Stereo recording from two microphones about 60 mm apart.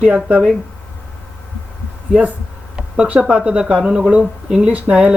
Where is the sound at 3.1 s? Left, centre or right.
Right.